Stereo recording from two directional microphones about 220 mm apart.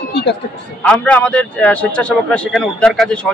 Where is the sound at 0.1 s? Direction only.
50° left (ahead or behind).